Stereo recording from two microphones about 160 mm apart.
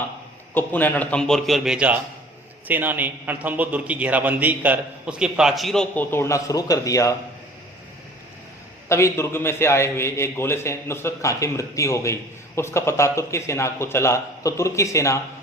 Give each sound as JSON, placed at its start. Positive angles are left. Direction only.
{"t": 0.5, "sound": "a man's voice", "side_deg": 10}
{"t": 8.9, "sound": "a man's voice", "side_deg": 15}